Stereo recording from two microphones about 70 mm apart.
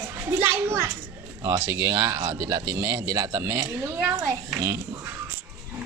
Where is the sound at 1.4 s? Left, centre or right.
Right.